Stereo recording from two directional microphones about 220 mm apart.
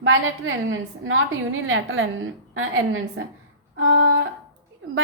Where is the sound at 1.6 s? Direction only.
65° right (ahead or behind).